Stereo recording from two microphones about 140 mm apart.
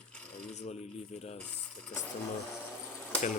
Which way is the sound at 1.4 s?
10° left (ahead or behind).